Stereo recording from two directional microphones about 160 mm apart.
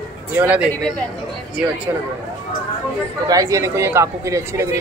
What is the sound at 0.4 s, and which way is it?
Speech, 10° right (ahead or behind).